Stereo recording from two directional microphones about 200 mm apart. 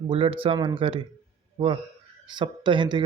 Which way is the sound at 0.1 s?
25° right (ahead or behind).